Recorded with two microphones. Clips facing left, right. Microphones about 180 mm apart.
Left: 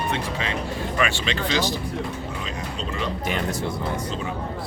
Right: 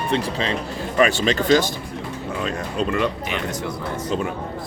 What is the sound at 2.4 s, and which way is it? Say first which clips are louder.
Speech: right 7 dB; 60° right (ahead or behind).